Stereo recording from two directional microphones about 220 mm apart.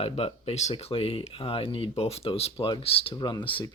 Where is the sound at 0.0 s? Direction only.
25° left (ahead or behind).